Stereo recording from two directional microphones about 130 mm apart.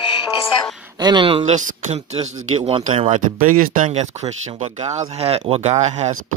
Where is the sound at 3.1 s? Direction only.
80° right.